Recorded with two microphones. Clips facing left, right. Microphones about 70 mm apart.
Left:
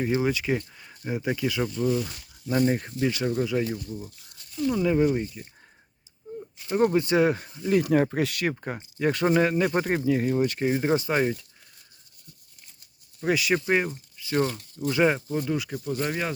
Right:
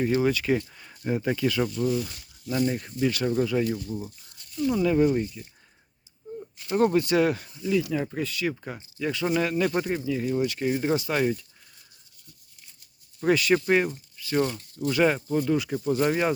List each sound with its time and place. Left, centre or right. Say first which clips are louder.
0.1 s speech: right 2 dB; centre
0.7 s speech: right 3 dB; centre
2.5 s speech: left 3 dB; left
3.0 s speech: right 3 dB; left
3.2 s speech: right 3 dB; centre
3.8 s speech: right 3 dB; right
4.9 s speech: right 1 dB; centre
5.2 s speech: right 1 dB; left
6.9 s speech: even; left
7.8 s speech: left 8 dB; left
8.4 s speech: left 1 dB; left
10.1 s speech: left 3 dB; left
10.7 s speech: even; left
13.2 s speech: right 2 dB; centre